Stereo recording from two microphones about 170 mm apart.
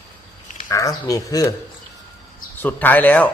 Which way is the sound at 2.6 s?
10° left (ahead or behind).